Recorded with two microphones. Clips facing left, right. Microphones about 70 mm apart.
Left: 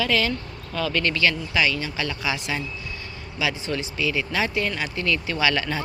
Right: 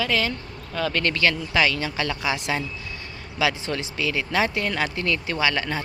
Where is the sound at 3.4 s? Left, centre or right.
Right.